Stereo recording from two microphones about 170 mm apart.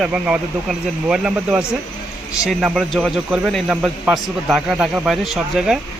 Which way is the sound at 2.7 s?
5° right (ahead or behind).